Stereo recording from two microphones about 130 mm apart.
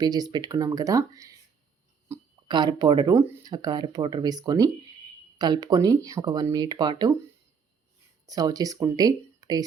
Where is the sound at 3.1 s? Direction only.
20° right (ahead or behind).